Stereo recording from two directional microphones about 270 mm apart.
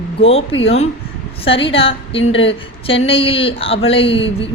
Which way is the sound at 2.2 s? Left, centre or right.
Left.